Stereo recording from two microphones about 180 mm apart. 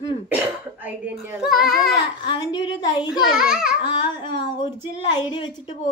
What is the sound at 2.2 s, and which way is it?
Speech, 30° left (ahead or behind).